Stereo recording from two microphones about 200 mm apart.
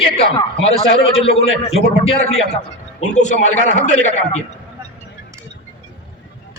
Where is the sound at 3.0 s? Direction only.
35° left (ahead or behind).